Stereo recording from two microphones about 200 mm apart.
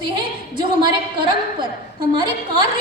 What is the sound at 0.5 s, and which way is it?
Speech, 20° right (ahead or behind).